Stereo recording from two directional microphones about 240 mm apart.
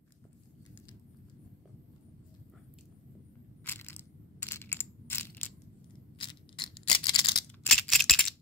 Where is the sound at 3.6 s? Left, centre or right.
Centre.